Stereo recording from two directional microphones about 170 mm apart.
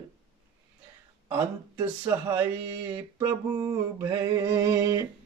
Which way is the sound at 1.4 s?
15° right (ahead or behind).